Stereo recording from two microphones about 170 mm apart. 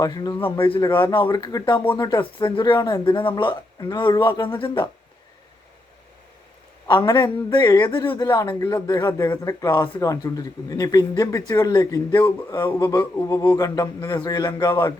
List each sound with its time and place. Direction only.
0.0 s speech: 20° left (ahead or behind)
7.0 s speech: 25° left (ahead or behind)